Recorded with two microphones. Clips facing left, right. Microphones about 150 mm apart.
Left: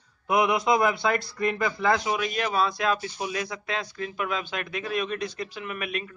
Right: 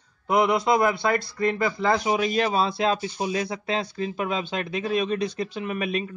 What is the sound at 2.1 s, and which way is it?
Speech, 25° right (ahead or behind).